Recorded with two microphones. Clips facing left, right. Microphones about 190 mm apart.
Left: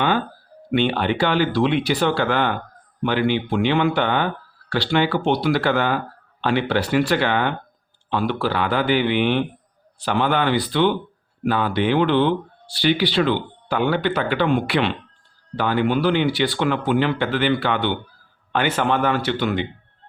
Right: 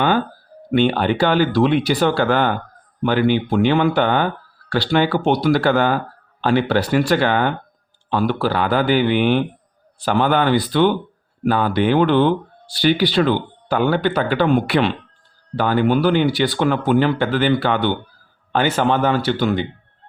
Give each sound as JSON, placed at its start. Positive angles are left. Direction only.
{"t": 0.7, "sound": "speech", "side_deg": -40}